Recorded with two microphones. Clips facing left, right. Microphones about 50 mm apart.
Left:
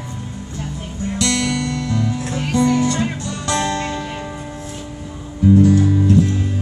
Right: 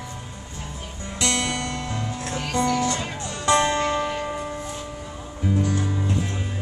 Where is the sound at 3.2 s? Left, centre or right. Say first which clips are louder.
Even; right.